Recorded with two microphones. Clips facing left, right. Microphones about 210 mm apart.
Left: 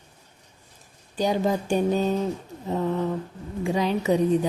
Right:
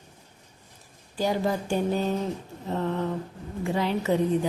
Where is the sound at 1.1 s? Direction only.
20° left (ahead or behind).